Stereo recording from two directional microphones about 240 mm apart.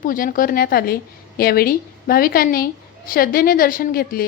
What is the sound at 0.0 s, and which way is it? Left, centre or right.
A woman's voice, left.